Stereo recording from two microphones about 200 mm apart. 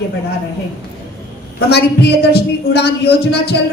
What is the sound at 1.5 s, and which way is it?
A woman's voice, 55° left (ahead or behind).